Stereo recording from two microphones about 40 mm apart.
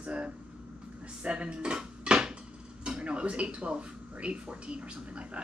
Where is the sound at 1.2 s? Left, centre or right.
Right.